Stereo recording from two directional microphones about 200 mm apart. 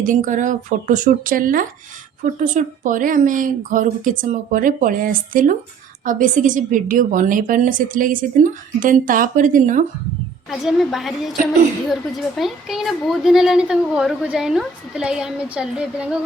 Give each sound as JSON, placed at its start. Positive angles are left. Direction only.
{"t": 0.0, "sound": "a woman's voice", "side_deg": -40}
{"t": 10.5, "sound": "speech", "side_deg": 0}